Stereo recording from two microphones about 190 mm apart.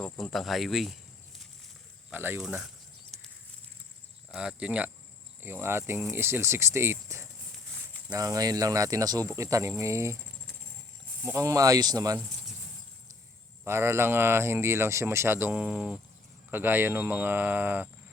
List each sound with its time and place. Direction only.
0.0 s speech: centre (ahead or behind)
2.0 s speech: 10° right (ahead or behind)
4.3 s speech: 5° right (ahead or behind)
11.2 s speech: 15° right (ahead or behind)
13.7 s speech: 15° right (ahead or behind)